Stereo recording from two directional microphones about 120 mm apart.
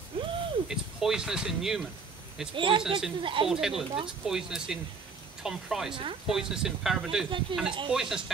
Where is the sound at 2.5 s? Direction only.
45° right (ahead or behind).